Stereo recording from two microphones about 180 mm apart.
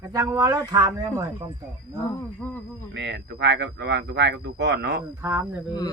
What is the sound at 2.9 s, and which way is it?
Speech, 70° right (ahead or behind).